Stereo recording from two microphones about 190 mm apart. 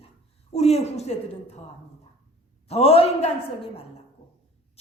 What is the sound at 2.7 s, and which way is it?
A woman's voice, 30° left (ahead or behind).